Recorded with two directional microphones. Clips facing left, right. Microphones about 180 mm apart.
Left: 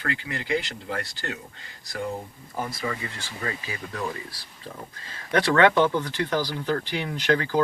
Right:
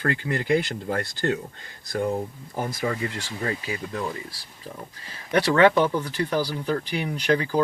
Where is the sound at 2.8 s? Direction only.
40° right (ahead or behind).